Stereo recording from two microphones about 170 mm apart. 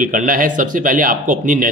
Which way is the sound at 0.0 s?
50° right (ahead or behind).